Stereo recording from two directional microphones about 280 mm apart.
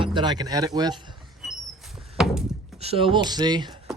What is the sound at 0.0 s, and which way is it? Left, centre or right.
Speech, centre.